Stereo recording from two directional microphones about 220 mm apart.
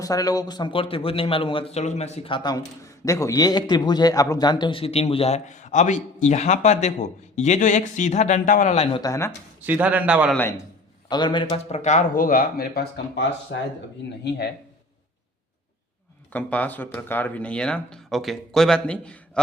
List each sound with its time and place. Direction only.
0.0 s speech: 15° left (ahead or behind)
9.0 s speech: 15° left (ahead or behind)
9.6 s a man's voice: 5° right (ahead or behind)
11.1 s speech: 20° left (ahead or behind); by 14.5 s 45° left (ahead or behind)
16.3 s speech: 5° left (ahead or behind)